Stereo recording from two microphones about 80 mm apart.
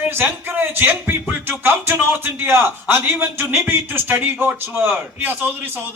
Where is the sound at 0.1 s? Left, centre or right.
Right.